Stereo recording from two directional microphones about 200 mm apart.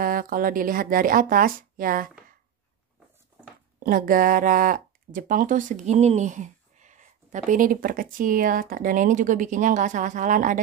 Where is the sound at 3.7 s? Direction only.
45° right (ahead or behind).